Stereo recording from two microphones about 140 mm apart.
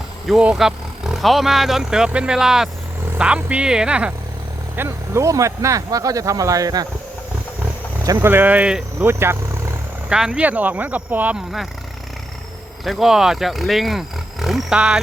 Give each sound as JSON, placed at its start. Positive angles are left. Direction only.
{"t": 0.3, "sound": "speech", "side_deg": -5}
{"t": 4.8, "sound": "speech", "side_deg": -20}
{"t": 8.0, "sound": "speech", "side_deg": -20}
{"t": 10.1, "sound": "speech", "side_deg": -5}
{"t": 12.8, "sound": "speech", "side_deg": 0}